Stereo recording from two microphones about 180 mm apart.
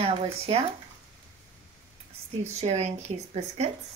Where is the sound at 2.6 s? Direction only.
40° right (ahead or behind).